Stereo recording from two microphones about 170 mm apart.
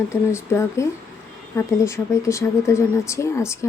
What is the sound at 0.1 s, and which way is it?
Speech, 15° left (ahead or behind).